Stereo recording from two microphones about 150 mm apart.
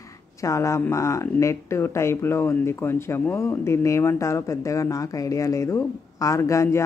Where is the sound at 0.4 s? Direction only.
20° left (ahead or behind).